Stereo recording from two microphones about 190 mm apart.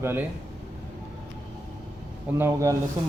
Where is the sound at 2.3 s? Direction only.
15° right (ahead or behind).